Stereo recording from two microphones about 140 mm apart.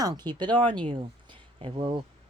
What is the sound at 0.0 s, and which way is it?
Speech, 30° right (ahead or behind).